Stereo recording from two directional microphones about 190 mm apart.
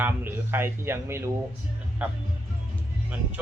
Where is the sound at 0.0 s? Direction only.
10° right (ahead or behind).